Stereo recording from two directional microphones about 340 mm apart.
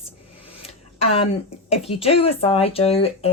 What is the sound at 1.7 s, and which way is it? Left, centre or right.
A woman's voice, centre.